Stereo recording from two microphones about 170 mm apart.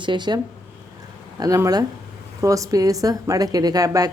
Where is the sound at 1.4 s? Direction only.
20° right (ahead or behind).